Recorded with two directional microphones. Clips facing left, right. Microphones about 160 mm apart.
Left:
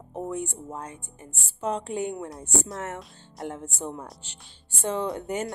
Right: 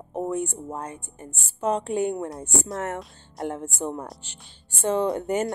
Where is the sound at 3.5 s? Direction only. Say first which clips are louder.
Right 4 dB; 55° right (ahead or behind).